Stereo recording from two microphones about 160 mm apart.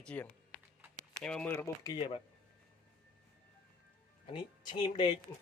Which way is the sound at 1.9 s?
30° left (ahead or behind).